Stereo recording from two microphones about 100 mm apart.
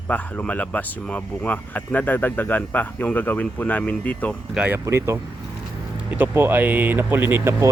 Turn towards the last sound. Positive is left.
turn(degrees=-20)  # may be behind; listen again after turning